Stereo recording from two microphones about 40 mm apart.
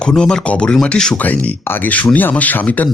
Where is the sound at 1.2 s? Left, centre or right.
Left.